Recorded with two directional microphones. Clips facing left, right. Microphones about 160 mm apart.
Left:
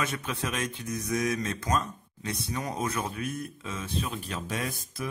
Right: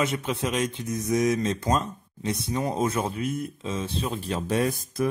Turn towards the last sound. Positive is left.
turn(degrees=-45)  # may be behind; listen again after turning